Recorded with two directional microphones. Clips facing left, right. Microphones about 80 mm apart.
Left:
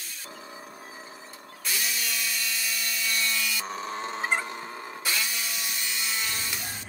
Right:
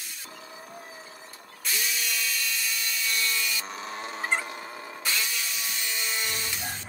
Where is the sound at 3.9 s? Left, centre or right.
Left.